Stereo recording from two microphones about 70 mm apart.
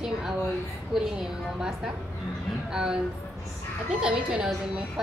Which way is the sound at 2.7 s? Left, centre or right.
Centre.